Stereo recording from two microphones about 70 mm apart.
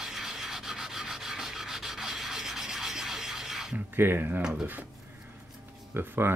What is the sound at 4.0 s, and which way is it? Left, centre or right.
Speech, right.